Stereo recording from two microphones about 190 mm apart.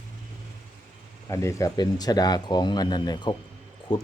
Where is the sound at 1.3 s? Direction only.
15° left (ahead or behind).